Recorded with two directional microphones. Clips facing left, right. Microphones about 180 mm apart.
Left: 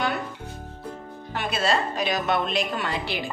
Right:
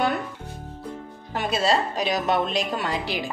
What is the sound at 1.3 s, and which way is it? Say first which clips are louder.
A woman's voice: right 2 dB; 40° right (ahead or behind).